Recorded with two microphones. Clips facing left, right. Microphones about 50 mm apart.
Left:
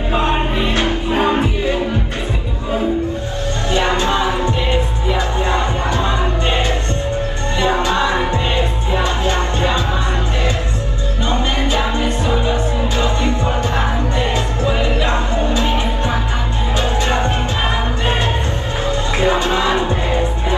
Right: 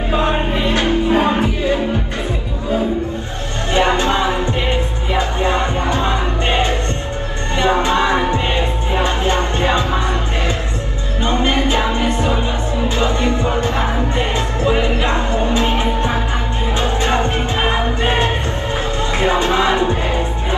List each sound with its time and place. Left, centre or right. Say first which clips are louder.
0.7 s music: right 4 dB; right
3.7 s music: right 2 dB; right
11.2 s music: right 3 dB; right